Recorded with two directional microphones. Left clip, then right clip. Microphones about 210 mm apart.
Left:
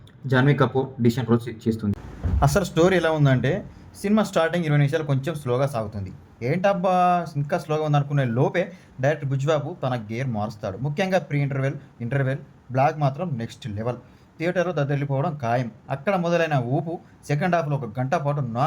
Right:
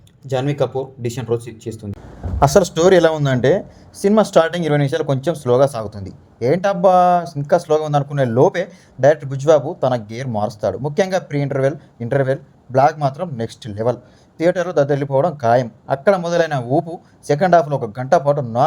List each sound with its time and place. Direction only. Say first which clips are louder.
2.4 s speech: right 7 dB; 25° right (ahead or behind)